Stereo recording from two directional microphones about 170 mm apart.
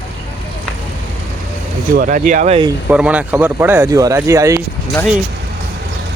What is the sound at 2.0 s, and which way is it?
Speech, 50° right (ahead or behind).